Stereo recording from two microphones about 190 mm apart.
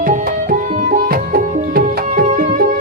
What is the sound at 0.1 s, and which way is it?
Music, 45° right (ahead or behind).